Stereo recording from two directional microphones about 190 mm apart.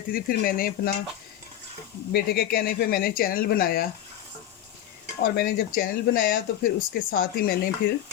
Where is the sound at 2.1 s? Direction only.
55° left (ahead or behind).